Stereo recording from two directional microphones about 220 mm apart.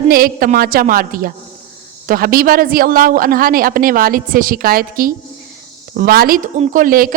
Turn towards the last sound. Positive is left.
turn(degrees=-40)  # may be behind; listen again after turning